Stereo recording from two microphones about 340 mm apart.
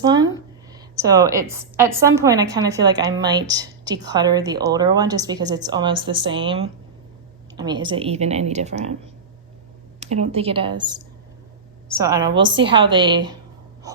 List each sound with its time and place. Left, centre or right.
0.0 s a sound: centre
0.7 s a woman's voice: centre
10.0 s a woman's voice: centre